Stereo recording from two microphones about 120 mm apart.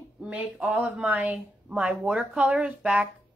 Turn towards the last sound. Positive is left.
turn(degrees=-10)  # may be behind; listen again after turning